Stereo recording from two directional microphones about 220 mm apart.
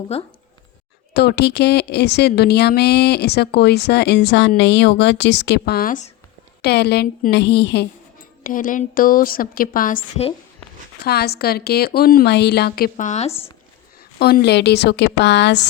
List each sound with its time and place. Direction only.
0.1 s a woman's voice: 30° left (ahead or behind)
1.1 s a woman's voice: 50° left (ahead or behind)
8.4 s a woman's voice: 40° left (ahead or behind)
10.0 s a woman's voice: 25° left (ahead or behind)
11.0 s a woman's voice: 45° left (ahead or behind); by 13.5 s 30° left (ahead or behind)
14.2 s a woman's voice: 45° left (ahead or behind)